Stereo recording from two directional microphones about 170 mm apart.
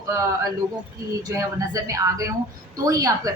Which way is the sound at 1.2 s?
20° right (ahead or behind).